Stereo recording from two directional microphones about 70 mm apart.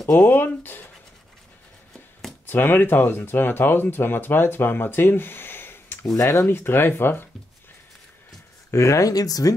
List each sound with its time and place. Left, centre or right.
0.1 s speech: left
2.4 s speech: left
6.1 s speech: left
6.4 s speech: left
8.7 s speech: left